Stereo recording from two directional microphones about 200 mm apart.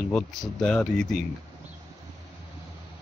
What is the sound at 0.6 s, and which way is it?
Speech, 5° left (ahead or behind).